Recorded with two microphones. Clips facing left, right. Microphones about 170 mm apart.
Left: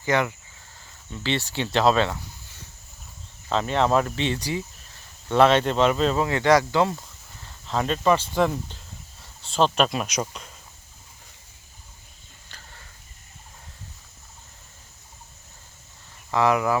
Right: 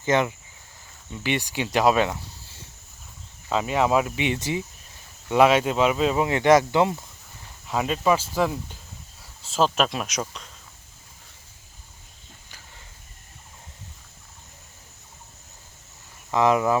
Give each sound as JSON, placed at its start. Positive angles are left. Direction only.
{"t": 0.0, "sound": "speech", "side_deg": -20}
{"t": 3.5, "sound": "speech", "side_deg": -10}
{"t": 5.3, "sound": "speech", "side_deg": -10}
{"t": 16.3, "sound": "speech", "side_deg": -20}